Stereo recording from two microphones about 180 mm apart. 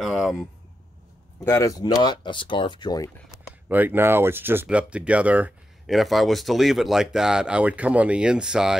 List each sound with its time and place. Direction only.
0.0 s a sound: centre (ahead or behind)
1.4 s speech: 15° left (ahead or behind)
3.6 s speech: 10° right (ahead or behind)